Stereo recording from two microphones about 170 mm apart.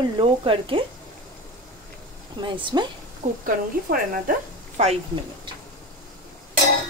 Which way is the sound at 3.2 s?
55° right (ahead or behind).